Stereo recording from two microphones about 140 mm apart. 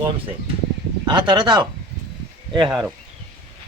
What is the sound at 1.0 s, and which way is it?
Speech, 35° right (ahead or behind).